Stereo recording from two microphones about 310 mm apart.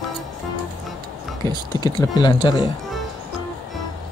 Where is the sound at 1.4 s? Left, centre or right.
Centre.